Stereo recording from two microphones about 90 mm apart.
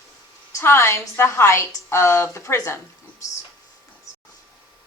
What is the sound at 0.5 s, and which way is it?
A woman's voice, 30° left (ahead or behind).